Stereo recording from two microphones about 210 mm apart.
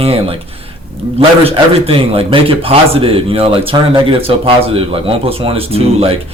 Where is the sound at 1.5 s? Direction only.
25° right (ahead or behind).